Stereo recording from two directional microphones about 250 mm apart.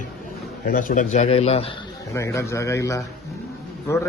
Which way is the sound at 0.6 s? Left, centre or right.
Left.